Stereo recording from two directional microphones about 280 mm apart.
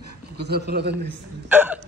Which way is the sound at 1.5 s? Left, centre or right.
Centre.